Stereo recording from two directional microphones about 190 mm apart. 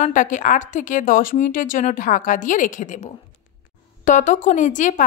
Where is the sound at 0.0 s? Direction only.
40° left (ahead or behind).